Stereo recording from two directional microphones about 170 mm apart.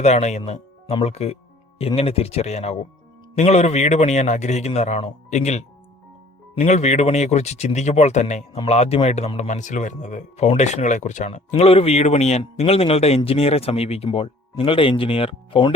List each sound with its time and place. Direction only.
0.0 s speech: 40° left (ahead or behind)